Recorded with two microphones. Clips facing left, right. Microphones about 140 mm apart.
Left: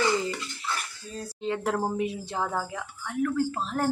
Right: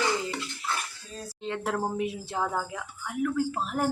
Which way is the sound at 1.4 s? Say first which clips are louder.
Left 2 dB; centre (ahead or behind).